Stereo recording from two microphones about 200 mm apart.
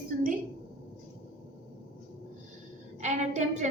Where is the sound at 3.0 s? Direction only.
35° right (ahead or behind).